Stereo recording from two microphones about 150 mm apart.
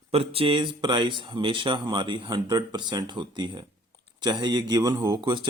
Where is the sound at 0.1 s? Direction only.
40° right (ahead or behind).